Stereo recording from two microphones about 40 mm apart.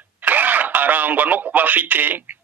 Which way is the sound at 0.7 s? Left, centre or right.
Right.